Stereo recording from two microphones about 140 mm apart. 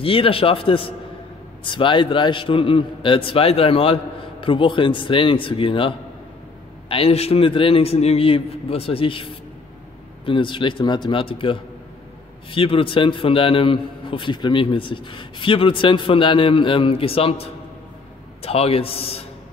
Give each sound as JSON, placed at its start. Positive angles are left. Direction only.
{"t": 0.0, "sound": "a man's voice", "side_deg": 40}